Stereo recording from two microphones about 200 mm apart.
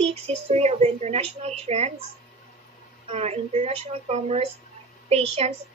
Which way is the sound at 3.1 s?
35° right (ahead or behind).